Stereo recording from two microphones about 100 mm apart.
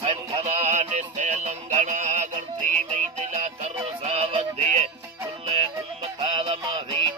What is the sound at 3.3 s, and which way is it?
Music, 90° right.